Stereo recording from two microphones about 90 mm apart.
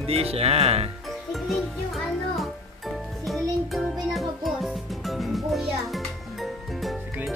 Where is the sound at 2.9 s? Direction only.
Centre (ahead or behind).